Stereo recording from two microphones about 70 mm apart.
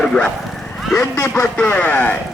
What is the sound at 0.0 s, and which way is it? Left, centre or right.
Bow-wow, centre.